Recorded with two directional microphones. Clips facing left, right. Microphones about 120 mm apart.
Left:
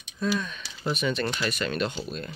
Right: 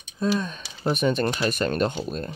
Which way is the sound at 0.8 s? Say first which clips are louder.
Right 5 dB; 50° right (ahead or behind).